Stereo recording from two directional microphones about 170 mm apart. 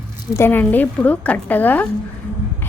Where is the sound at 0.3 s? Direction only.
10° left (ahead or behind).